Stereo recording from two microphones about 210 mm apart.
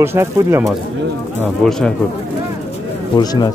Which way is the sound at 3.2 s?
20° left (ahead or behind).